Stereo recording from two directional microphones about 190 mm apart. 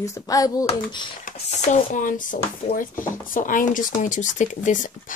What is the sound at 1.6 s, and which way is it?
Speech, 40° left (ahead or behind).